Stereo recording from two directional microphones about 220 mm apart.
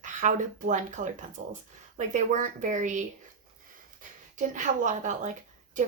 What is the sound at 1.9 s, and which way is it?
Speech, 35° right (ahead or behind).